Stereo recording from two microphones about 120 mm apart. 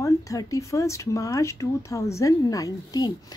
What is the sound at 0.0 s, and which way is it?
Speech, 30° left (ahead or behind).